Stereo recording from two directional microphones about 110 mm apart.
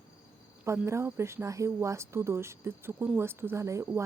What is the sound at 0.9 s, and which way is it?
A woman's voice, 25° right (ahead or behind).